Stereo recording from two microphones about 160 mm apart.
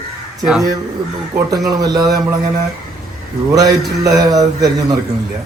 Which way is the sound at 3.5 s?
20° right (ahead or behind).